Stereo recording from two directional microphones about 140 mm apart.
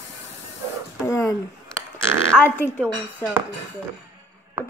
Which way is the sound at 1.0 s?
20° left (ahead or behind).